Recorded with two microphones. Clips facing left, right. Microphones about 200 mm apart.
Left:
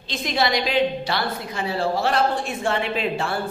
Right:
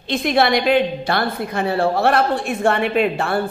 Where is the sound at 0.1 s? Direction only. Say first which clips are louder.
Right 6 dB; 60° right (ahead or behind).